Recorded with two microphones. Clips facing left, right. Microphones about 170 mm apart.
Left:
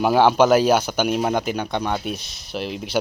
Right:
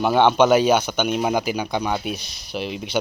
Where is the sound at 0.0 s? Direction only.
5° left (ahead or behind).